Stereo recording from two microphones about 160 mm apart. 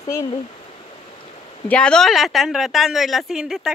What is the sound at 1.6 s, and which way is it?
A woman's voice, 5° left (ahead or behind).